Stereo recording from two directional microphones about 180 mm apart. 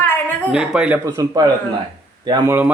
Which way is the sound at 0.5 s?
5° right (ahead or behind).